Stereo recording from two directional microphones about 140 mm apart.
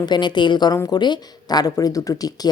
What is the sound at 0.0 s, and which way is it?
Speech, 30° left (ahead or behind).